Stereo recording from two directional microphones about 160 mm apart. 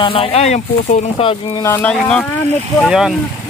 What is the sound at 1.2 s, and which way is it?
Speech, 35° left (ahead or behind).